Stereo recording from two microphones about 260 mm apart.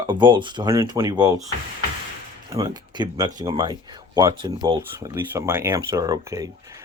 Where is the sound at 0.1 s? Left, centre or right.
Centre.